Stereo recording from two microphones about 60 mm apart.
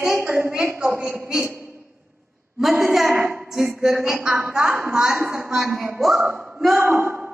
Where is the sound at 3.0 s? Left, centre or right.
Right.